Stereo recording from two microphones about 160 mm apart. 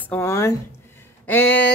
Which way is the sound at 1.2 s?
10° left (ahead or behind).